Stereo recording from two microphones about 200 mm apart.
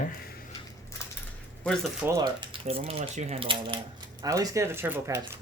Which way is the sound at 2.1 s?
20° right (ahead or behind).